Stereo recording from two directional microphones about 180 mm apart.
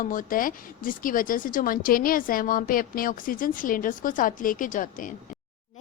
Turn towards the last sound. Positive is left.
turn(degrees=45)  # may be behind; listen again after turning